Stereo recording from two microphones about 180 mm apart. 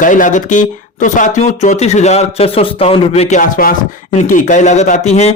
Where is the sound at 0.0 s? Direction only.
45° left (ahead or behind).